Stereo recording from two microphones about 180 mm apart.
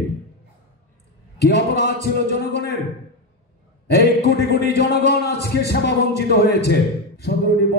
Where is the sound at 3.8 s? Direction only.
65° left (ahead or behind).